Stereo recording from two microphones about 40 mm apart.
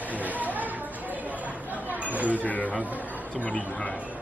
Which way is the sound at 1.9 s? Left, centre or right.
Right.